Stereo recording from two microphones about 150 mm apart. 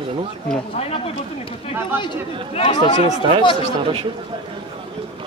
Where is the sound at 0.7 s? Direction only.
40° left (ahead or behind).